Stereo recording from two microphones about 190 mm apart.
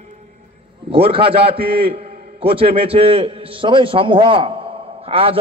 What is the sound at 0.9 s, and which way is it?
A man's voice, 30° right (ahead or behind).